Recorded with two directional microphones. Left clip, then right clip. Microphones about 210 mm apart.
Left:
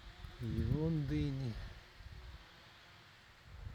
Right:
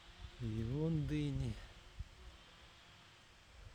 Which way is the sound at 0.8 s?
Centre (ahead or behind).